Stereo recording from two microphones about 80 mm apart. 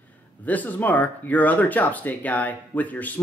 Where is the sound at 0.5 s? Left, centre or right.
Left.